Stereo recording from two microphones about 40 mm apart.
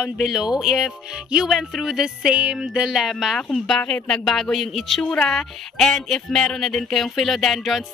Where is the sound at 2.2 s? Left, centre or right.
Right.